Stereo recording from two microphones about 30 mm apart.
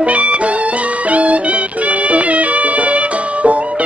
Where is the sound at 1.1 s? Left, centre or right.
Right.